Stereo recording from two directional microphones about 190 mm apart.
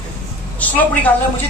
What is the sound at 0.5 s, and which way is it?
Speech, 10° left (ahead or behind).